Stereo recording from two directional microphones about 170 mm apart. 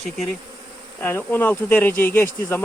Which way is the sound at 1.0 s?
10° left (ahead or behind).